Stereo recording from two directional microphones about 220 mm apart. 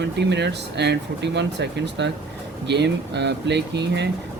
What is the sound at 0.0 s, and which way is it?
Speech, 50° right (ahead or behind).